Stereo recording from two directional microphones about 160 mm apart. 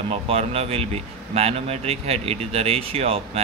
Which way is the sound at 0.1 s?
40° right (ahead or behind).